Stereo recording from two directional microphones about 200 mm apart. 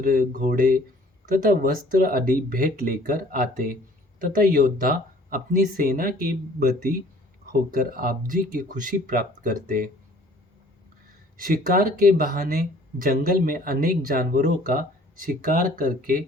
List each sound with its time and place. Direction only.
0.0 s speech: 45° right (ahead or behind)
11.3 s speech: 45° right (ahead or behind)